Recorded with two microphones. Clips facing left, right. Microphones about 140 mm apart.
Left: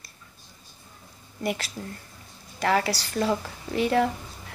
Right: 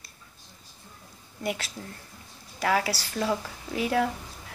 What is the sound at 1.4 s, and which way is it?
Speech, centre (ahead or behind).